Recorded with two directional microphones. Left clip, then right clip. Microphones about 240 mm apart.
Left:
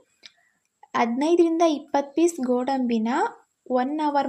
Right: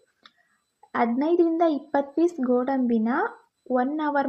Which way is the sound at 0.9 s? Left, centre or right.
Left.